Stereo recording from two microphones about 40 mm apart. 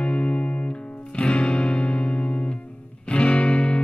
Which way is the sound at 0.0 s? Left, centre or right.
Left.